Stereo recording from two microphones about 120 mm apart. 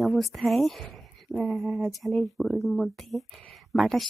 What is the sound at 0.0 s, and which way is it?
Speech, centre (ahead or behind).